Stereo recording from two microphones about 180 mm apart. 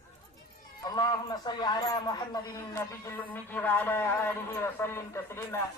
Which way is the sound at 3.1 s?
10° left (ahead or behind).